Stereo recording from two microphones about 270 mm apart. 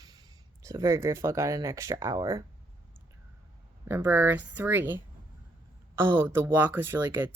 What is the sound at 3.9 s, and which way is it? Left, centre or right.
Speech, centre.